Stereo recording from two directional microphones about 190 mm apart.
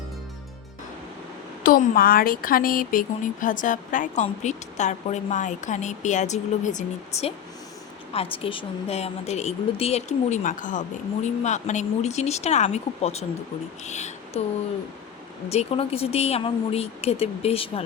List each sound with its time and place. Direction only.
1.6 s speech: 50° left (ahead or behind)
15.4 s speech: 30° left (ahead or behind)